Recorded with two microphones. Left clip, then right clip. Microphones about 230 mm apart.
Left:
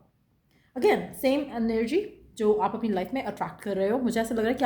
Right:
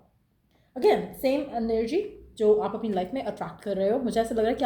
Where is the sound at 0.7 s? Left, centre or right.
Left.